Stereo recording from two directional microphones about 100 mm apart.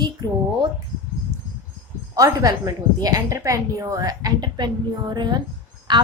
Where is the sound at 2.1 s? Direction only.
35° right (ahead or behind).